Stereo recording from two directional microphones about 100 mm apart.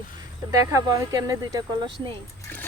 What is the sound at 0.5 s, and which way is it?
Speech, 35° right (ahead or behind).